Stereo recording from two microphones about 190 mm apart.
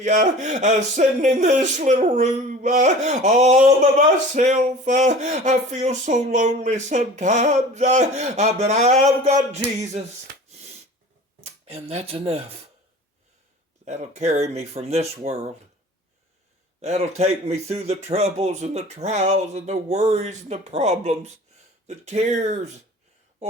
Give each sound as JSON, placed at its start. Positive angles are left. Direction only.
{"t": 0.0, "sound": "speech", "side_deg": -40}
{"t": 10.5, "sound": "sneeze", "side_deg": -35}
{"t": 11.6, "sound": "speech", "side_deg": -35}
{"t": 13.8, "sound": "speech", "side_deg": -35}
{"t": 16.8, "sound": "speech", "side_deg": -35}